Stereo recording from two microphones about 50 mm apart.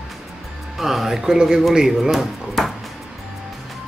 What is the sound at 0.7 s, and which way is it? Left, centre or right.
Speech, centre.